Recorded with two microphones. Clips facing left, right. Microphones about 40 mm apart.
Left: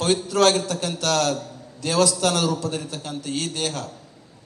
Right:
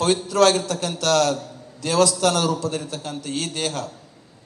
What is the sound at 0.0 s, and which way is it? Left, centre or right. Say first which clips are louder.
A man's voice: right 1 dB; right.